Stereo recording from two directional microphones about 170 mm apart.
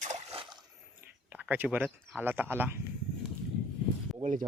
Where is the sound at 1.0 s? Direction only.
10° right (ahead or behind).